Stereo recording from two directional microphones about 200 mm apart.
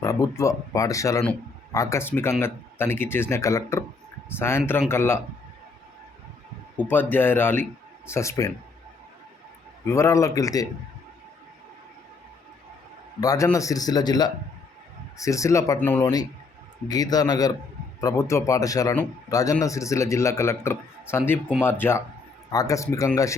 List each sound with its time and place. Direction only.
0.0 s speech: 15° left (ahead or behind)
6.7 s speech: 10° left (ahead or behind)
9.8 s speech: 15° left (ahead or behind)
13.1 s a man's voice: 15° left (ahead or behind)